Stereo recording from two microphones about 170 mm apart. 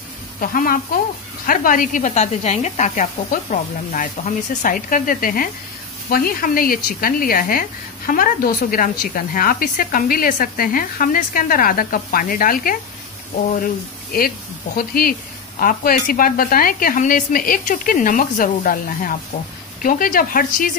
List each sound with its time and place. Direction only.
0.4 s speech: 55° left (ahead or behind)
14.8 s speech: 60° left (ahead or behind)